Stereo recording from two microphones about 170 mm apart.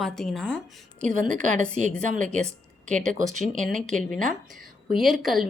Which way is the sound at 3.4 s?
5° left (ahead or behind).